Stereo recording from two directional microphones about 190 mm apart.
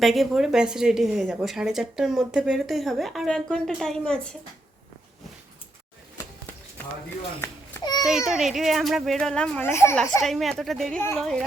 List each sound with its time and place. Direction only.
0.0 s a woman's voice: centre (ahead or behind)
7.4 s babbling: 15° left (ahead or behind)
8.3 s a woman's voice: centre (ahead or behind)